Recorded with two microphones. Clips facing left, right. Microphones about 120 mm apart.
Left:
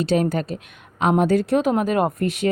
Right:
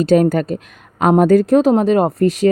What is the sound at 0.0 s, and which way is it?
A woman's voice, 45° right (ahead or behind).